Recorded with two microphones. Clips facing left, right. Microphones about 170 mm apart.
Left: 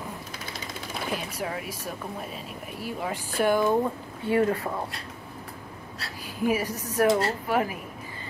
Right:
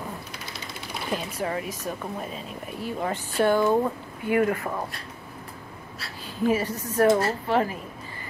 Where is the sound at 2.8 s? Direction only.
10° left (ahead or behind).